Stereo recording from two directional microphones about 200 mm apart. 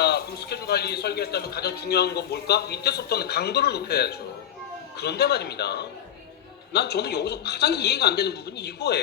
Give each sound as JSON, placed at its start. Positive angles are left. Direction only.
{"t": 0.0, "sound": "a man's voice", "side_deg": 55}